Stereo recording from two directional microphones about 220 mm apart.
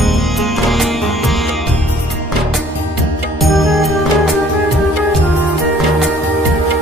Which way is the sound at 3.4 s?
Centre (ahead or behind).